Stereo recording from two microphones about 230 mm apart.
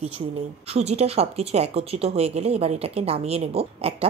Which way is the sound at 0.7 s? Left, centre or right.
Right.